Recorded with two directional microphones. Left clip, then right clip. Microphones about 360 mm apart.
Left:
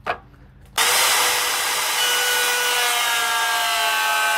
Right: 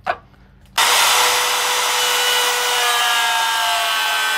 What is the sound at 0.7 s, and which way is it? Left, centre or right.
Hair dryer, centre.